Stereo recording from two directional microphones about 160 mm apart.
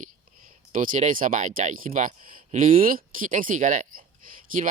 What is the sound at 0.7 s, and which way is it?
Speech, 55° right (ahead or behind).